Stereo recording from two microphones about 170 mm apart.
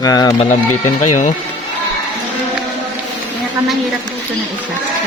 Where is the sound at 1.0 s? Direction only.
45° left (ahead or behind).